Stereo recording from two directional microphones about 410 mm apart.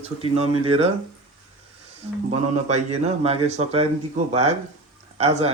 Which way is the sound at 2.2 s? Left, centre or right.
Centre.